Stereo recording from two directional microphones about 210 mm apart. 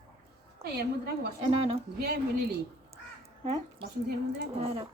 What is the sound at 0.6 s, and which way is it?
Speech, 50° right (ahead or behind).